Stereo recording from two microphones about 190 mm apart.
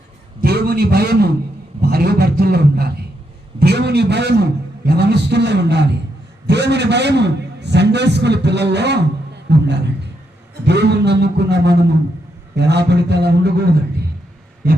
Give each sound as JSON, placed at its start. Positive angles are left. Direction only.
{"t": 0.4, "sound": "a man's voice", "side_deg": -55}
{"t": 1.9, "sound": "a sound", "side_deg": -55}
{"t": 4.9, "sound": "a man's voice", "side_deg": -60}